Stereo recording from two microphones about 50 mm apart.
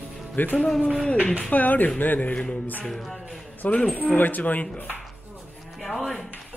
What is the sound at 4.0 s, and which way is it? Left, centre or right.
Speech, left.